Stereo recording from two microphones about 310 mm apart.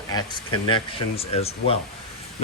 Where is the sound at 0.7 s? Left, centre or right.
Centre.